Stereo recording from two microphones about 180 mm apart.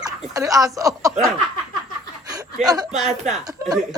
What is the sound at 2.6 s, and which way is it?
A woman's voice, 20° right (ahead or behind).